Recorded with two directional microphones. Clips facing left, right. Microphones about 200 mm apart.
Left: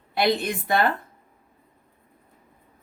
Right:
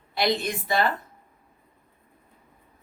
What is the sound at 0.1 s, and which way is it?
Speech, 60° left (ahead or behind).